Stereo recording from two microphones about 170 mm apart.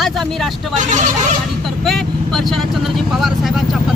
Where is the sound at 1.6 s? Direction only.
Centre (ahead or behind).